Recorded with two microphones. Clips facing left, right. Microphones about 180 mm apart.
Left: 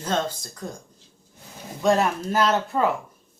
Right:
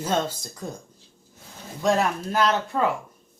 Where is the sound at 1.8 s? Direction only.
Centre (ahead or behind).